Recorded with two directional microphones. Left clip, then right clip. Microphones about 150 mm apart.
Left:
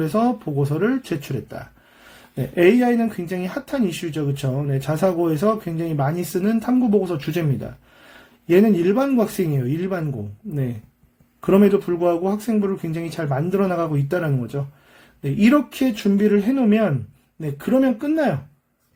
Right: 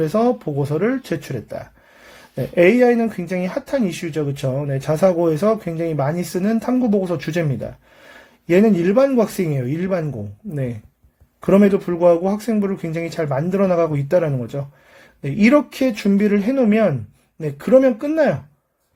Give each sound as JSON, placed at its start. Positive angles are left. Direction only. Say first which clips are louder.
{"t": 0.0, "sound": "speech", "louder": "right 3 dB", "side_deg": -25}
{"t": 11.3, "sound": "speech", "louder": "right 1 dB", "side_deg": -35}